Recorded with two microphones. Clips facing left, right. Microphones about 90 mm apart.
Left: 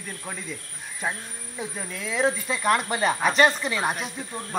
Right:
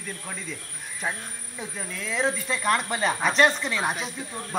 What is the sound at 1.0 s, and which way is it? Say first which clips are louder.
Speech: left 1 dB; 5° left (ahead or behind).